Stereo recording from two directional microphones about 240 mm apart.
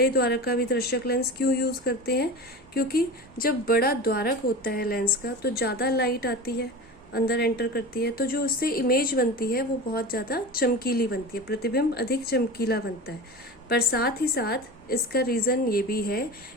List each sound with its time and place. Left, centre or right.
0.0 s a woman's voice: left